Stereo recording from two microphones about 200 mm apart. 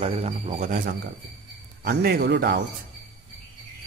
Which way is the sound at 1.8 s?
50° right (ahead or behind).